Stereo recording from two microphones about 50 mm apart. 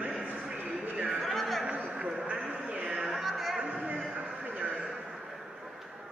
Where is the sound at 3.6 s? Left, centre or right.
Right.